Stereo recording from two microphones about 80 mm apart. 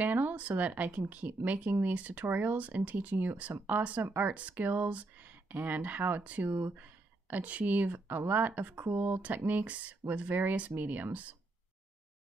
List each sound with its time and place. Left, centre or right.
0.0 s speech: right
4.3 s speech: centre